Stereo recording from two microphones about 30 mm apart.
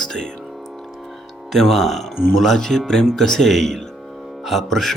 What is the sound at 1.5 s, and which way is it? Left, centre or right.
Speech, centre.